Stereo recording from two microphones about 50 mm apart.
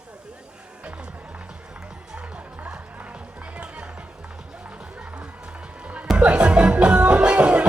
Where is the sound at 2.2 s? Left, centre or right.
Centre.